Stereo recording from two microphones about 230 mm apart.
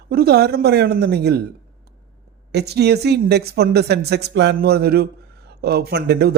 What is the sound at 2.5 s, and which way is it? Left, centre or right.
A man's voice, right.